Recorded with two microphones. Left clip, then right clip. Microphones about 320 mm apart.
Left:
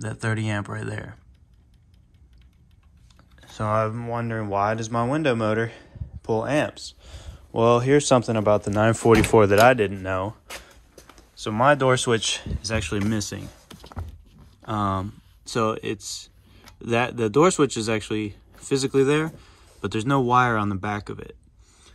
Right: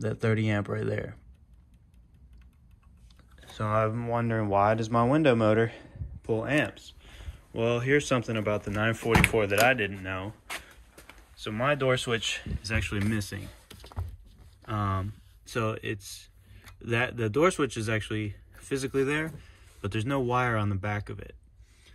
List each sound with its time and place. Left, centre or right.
0.0 s speech: centre
3.3 s speech: centre
9.0 s speech: left
9.7 s speech: centre
10.0 s speech: left
11.4 s speech: centre